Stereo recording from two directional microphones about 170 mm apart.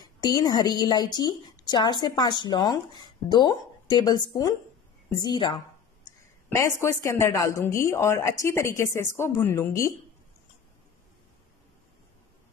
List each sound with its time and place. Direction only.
0.0 s a woman's voice: 25° left (ahead or behind)
6.5 s a woman's voice: 15° left (ahead or behind)